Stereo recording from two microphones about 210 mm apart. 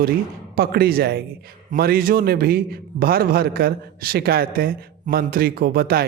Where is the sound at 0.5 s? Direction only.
45° right (ahead or behind).